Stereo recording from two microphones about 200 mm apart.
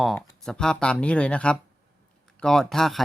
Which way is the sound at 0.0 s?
Centre (ahead or behind).